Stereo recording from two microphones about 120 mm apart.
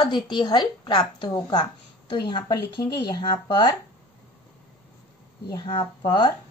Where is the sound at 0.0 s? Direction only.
40° left (ahead or behind).